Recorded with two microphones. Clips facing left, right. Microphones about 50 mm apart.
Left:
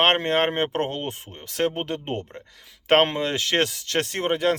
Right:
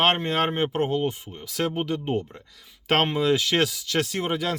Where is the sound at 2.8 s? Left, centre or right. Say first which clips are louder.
Left 4 dB; left.